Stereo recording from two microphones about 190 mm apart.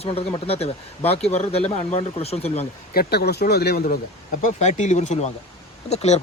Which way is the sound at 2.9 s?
55° left (ahead or behind).